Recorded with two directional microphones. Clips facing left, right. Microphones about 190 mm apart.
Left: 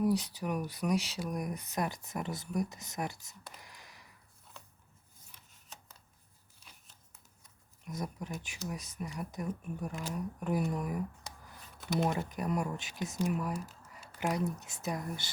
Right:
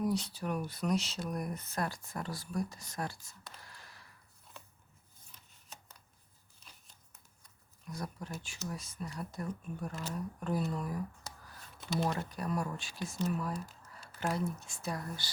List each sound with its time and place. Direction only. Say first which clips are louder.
0.0 s speech: left 3 dB; 15° left (ahead or behind)
7.9 s speech: left 2 dB; 20° left (ahead or behind)